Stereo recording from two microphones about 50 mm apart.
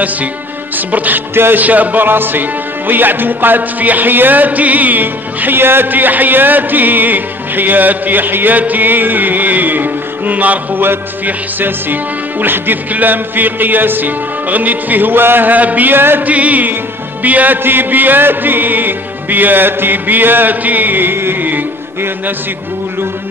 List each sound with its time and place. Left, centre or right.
0.7 s speech: right
1.3 s speech: right
1.6 s speech: right
16.3 s speech: right